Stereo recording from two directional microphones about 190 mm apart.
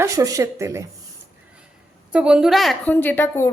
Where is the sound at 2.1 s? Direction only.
5° right (ahead or behind); by 3.5 s 10° left (ahead or behind).